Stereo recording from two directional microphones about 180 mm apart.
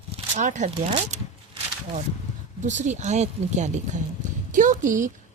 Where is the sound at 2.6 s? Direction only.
45° right (ahead or behind).